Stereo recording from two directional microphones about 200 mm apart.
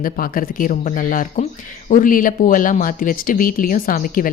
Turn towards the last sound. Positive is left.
turn(degrees=45)  # may be behind; listen again after turning